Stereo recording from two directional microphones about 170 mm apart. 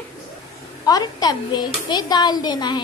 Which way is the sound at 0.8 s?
20° left (ahead or behind).